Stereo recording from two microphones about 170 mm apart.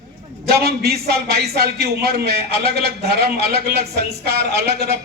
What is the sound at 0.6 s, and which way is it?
A man's voice, 70° right (ahead or behind).